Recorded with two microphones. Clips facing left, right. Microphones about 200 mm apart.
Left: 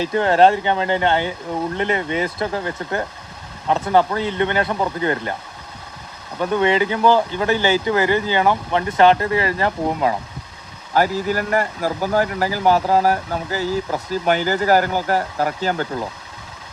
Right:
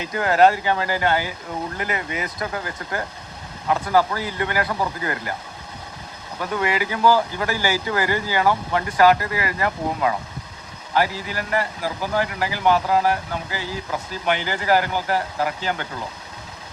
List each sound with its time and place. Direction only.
0.0 s speech: 30° left (ahead or behind)
6.4 s speech: 25° left (ahead or behind)
10.9 s speech: 45° left (ahead or behind)